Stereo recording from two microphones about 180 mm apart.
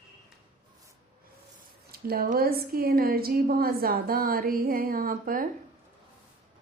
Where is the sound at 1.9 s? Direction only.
55° right (ahead or behind).